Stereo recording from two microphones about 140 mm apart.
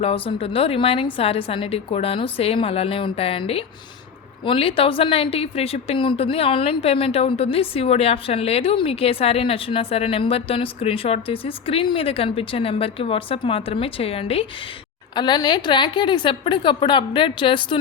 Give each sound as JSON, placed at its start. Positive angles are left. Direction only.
{"t": 0.0, "sound": "a woman's voice", "side_deg": 45}
{"t": 15.1, "sound": "a woman's voice", "side_deg": 30}